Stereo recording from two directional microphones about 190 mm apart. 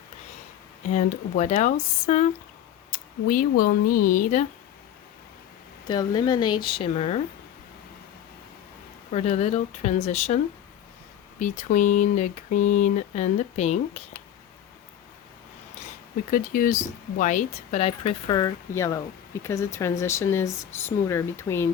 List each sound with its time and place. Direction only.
0.9 s speech: 40° left (ahead or behind)
2.9 s speech: 50° left (ahead or behind)
5.9 s speech: 20° left (ahead or behind)
9.1 s speech: 35° left (ahead or behind)
16.3 s speech: 45° left (ahead or behind); by 21.7 s 10° left (ahead or behind)